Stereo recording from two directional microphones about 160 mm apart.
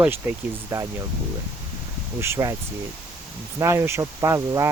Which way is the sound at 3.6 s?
15° right (ahead or behind).